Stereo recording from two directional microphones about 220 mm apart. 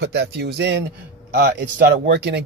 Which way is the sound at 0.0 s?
50° right (ahead or behind).